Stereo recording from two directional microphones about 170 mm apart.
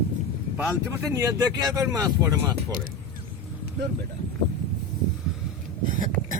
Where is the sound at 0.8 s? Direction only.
20° right (ahead or behind).